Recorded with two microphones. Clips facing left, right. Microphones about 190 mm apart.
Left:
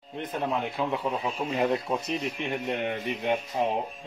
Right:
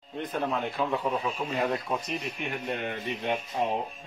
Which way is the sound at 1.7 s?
25° left (ahead or behind).